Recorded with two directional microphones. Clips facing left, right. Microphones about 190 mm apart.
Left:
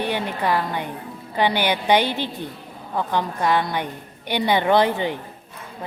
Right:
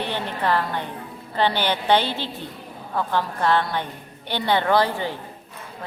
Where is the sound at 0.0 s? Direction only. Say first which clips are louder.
Left 2 dB; 10° left (ahead or behind).